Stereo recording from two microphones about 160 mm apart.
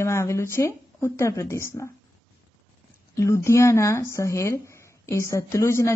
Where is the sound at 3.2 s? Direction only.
15° left (ahead or behind).